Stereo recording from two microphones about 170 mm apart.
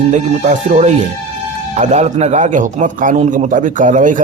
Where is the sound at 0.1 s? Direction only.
45° right (ahead or behind).